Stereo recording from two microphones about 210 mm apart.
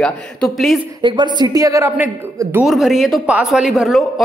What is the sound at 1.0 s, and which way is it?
A man's voice, 20° right (ahead or behind).